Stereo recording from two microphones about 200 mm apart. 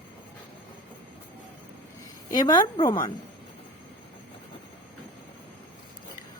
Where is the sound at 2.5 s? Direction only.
20° left (ahead or behind).